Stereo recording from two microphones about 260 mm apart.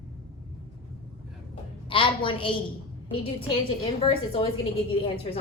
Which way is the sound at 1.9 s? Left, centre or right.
Centre.